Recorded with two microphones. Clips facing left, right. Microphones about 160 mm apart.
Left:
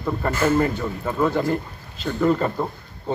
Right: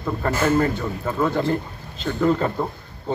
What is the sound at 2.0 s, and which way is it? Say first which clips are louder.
Speech: even; centre (ahead or behind).